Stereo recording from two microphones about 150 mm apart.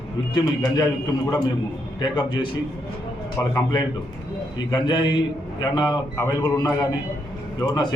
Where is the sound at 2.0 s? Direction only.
30° left (ahead or behind).